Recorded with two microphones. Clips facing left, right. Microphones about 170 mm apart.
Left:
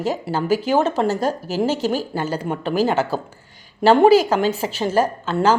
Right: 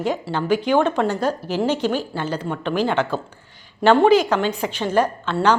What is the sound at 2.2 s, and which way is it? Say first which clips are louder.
Speech: left 1 dB; 10° left (ahead or behind).